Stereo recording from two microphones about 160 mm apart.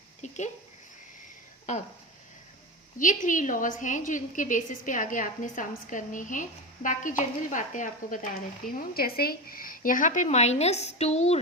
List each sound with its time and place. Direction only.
0.2 s a sound: 50° left (ahead or behind)
1.7 s a woman's voice: 50° left (ahead or behind)
3.0 s a woman's voice: 55° left (ahead or behind)
9.0 s a woman's voice: 70° left (ahead or behind); by 11.3 s 40° left (ahead or behind)